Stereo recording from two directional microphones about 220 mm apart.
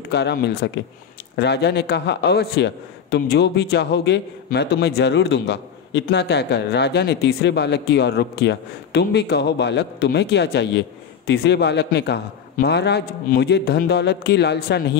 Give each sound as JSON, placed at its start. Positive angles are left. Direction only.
{"t": 0.1, "sound": "a man's voice", "side_deg": 50}